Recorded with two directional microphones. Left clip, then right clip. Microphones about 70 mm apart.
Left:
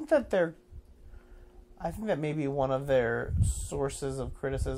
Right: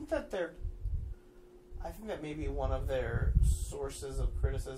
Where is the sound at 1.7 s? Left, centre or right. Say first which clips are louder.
Left 9 dB; left.